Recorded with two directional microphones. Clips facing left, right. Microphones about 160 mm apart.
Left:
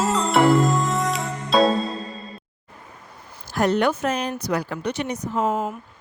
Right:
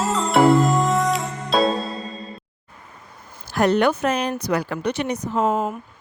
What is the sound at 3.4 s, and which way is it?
Speech, 70° right (ahead or behind).